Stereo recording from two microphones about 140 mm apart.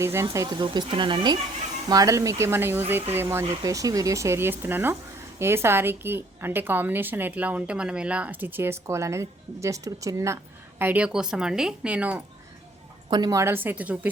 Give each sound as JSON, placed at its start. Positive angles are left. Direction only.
{"t": 0.0, "sound": "speech", "side_deg": -20}
{"t": 0.6, "sound": "a woman's voice", "side_deg": -35}
{"t": 10.8, "sound": "a woman's voice", "side_deg": -10}
{"t": 13.1, "sound": "a woman's voice", "side_deg": -30}